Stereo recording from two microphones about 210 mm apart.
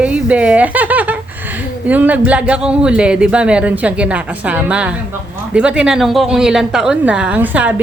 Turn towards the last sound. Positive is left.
turn(degrees=-5)  # may be behind; listen again after turning